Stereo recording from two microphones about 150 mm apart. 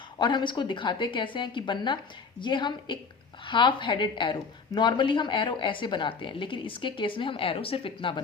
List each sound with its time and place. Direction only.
0.2 s a woman's voice: 30° left (ahead or behind)